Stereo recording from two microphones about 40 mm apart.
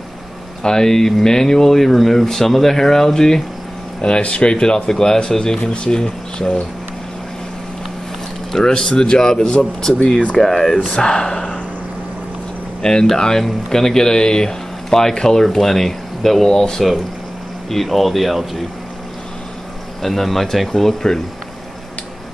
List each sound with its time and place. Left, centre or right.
0.6 s speech: centre
4.0 s speech: left
5.6 s speech: left
8.5 s speech: centre
13.1 s speech: centre
17.6 s speech: centre
20.0 s speech: centre